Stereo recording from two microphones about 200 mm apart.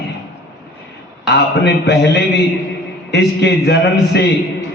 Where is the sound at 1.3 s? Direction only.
55° left (ahead or behind).